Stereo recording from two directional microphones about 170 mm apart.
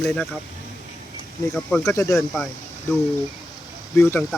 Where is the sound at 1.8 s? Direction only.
20° left (ahead or behind).